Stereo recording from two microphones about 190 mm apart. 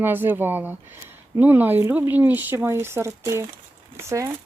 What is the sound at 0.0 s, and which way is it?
Speech, 10° right (ahead or behind).